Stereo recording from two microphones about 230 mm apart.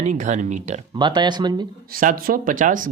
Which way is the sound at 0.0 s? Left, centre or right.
Right.